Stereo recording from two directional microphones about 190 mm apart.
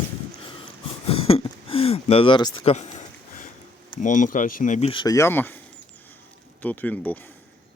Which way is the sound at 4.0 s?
40° left (ahead or behind).